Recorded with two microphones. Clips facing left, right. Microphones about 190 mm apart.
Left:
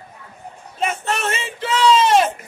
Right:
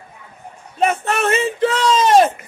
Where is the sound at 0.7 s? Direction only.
55° right (ahead or behind).